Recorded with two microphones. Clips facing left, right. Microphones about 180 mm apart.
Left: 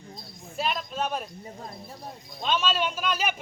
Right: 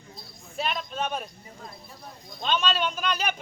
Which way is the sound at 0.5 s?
Centre (ahead or behind).